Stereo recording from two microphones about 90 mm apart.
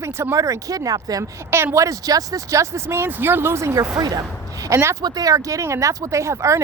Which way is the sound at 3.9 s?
45° right (ahead or behind).